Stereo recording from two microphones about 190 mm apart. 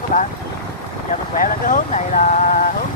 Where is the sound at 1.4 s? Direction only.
45° left (ahead or behind).